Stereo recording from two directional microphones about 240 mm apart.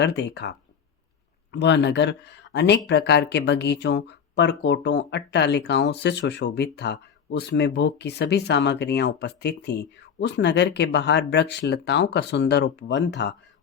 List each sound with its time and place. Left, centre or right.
0.0 s speech: left
1.5 s speech: left